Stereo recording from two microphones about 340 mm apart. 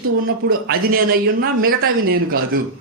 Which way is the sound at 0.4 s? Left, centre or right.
Right.